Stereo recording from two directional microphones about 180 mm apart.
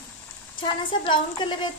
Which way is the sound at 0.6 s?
25° left (ahead or behind).